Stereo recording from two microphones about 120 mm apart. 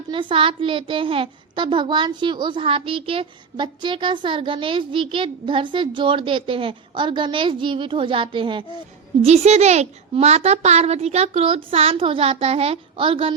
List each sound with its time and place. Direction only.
0.1 s a child's voice: 45° right (ahead or behind)
9.2 s a child's voice: 60° right (ahead or behind)